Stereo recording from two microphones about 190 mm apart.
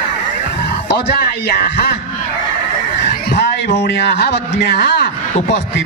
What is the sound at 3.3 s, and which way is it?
A man's voice, 65° left (ahead or behind).